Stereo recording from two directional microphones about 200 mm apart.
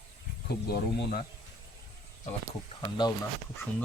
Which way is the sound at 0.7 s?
50° left (ahead or behind).